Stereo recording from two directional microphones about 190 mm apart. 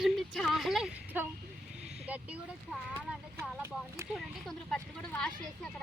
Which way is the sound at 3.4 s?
10° right (ahead or behind).